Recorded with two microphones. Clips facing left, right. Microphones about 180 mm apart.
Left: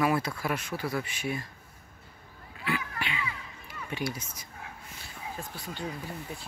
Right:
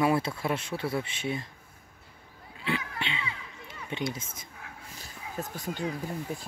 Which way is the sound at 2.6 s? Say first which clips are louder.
Right 1 dB; 25° right (ahead or behind).